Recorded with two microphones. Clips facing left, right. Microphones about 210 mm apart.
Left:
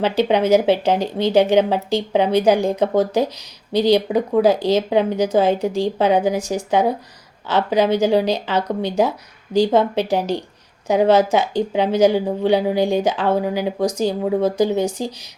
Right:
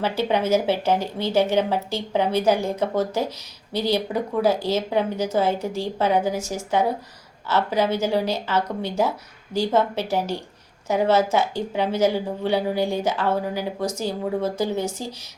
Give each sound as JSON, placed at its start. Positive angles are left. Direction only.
{"t": 0.0, "sound": "speech", "side_deg": 20}